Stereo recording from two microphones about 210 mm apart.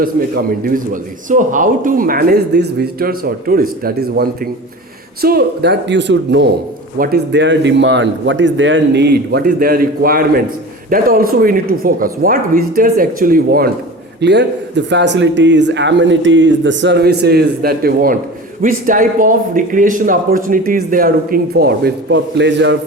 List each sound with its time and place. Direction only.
1.3 s a man's voice: 40° right (ahead or behind)
14.2 s a man's voice: 55° right (ahead or behind)